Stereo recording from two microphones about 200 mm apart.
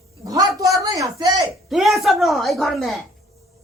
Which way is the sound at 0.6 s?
15° right (ahead or behind).